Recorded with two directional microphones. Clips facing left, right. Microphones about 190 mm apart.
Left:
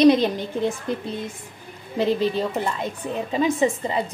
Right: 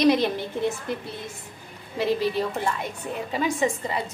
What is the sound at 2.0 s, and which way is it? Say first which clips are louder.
A woman's voice: left 3 dB; 20° left (ahead or behind).